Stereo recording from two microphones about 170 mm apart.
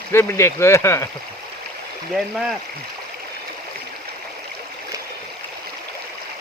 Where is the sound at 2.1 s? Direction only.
Centre (ahead or behind).